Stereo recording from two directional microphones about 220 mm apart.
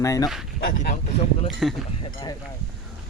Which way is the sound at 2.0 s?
25° left (ahead or behind).